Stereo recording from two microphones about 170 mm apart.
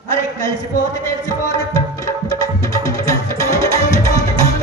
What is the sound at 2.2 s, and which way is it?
Music, 20° left (ahead or behind).